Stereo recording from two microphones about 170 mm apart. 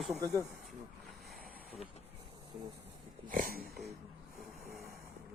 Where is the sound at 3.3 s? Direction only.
55° right (ahead or behind).